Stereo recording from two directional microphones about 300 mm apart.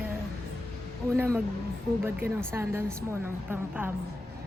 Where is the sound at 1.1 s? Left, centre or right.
Centre.